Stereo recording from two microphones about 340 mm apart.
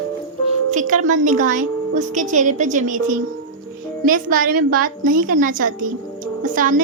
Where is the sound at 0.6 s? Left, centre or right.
Right.